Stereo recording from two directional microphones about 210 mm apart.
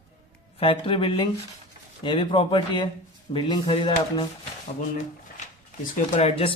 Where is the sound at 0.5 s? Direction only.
25° left (ahead or behind).